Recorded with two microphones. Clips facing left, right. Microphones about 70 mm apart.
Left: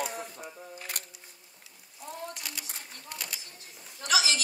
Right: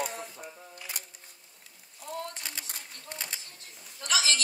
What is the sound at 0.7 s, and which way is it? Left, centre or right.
Camera, left.